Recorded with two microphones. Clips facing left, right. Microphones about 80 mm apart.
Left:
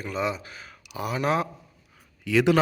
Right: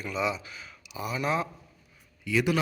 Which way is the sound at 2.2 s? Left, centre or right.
Left.